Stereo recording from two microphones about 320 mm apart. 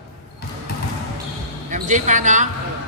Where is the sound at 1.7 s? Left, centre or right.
Right.